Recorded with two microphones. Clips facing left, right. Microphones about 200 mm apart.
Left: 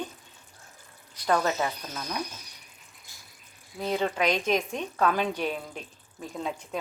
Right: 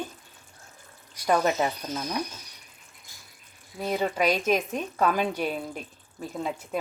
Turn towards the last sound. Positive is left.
turn(degrees=-5)  # may be behind; listen again after turning